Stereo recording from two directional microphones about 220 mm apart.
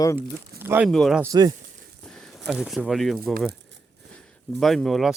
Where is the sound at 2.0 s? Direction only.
5° left (ahead or behind).